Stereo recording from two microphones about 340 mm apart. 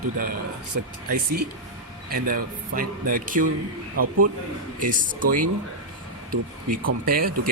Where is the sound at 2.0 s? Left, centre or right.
Right.